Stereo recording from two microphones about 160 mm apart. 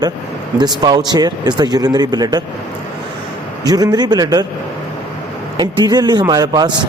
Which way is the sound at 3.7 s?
25° right (ahead or behind).